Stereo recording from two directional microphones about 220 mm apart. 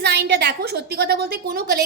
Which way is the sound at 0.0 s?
50° right (ahead or behind).